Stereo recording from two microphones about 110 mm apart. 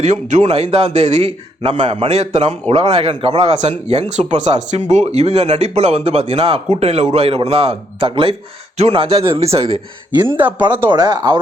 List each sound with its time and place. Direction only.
0.0 s speech: 90° right; by 3.5 s 55° right (ahead or behind)
3.6 s speech: 90° right; by 9.8 s 60° right (ahead or behind)
10.2 s speech: 15° right (ahead or behind)
10.8 s speech: 40° right (ahead or behind)